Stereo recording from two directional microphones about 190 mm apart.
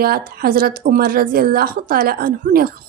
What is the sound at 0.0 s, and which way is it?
Speech, 50° right (ahead or behind).